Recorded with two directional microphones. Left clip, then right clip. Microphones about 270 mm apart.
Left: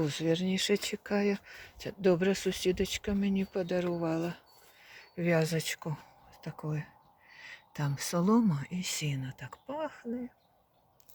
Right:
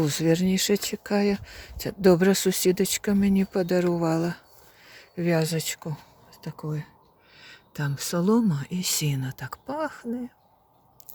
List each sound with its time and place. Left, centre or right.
0.0 s speech: right